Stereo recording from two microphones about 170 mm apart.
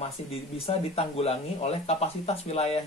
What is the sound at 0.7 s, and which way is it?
Speech, 35° left (ahead or behind).